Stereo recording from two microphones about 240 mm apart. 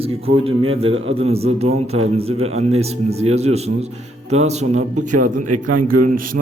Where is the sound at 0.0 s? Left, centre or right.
Right.